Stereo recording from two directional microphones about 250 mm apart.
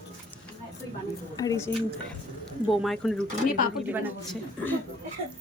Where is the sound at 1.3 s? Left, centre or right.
Centre.